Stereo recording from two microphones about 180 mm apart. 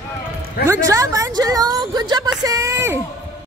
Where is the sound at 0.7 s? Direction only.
20° right (ahead or behind).